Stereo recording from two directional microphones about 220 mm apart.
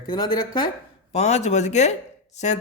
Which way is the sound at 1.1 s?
30° left (ahead or behind).